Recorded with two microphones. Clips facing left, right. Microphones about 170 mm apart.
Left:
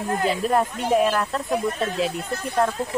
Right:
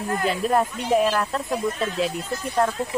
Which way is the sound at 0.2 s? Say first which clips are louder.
Even; centre (ahead or behind).